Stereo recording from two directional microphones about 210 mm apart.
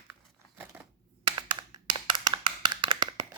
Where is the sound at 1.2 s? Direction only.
20° right (ahead or behind).